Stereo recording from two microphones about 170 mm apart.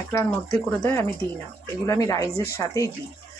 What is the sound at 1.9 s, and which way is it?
Speech, 20° left (ahead or behind).